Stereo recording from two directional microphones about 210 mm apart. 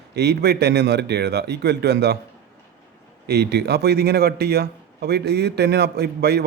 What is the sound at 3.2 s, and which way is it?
A man's voice, 50° right (ahead or behind).